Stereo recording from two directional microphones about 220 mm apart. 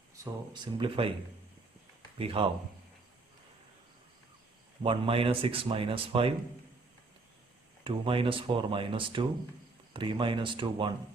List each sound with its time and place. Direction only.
0.5 s speech: 20° right (ahead or behind)
2.1 s speech: 25° right (ahead or behind)
4.8 s speech: 25° right (ahead or behind)
7.9 s speech: 25° right (ahead or behind)